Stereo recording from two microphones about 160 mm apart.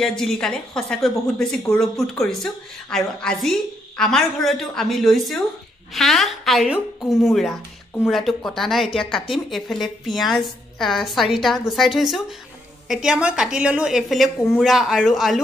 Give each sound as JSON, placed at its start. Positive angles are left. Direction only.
{"t": 0.2, "sound": "a woman's voice", "side_deg": 5}